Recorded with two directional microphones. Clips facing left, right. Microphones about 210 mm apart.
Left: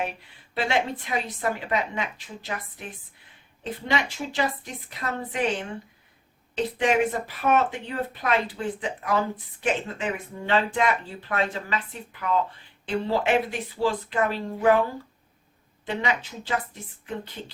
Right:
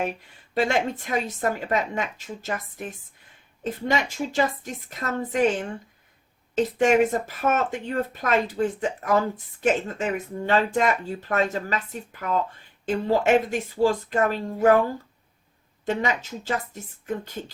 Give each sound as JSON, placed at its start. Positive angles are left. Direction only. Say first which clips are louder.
{"t": 0.5, "sound": "speech", "louder": "right 3 dB", "side_deg": -45}
{"t": 12.8, "sound": "speech", "louder": "right 3 dB", "side_deg": -45}
{"t": 15.9, "sound": "speech", "louder": "right 3 dB", "side_deg": -45}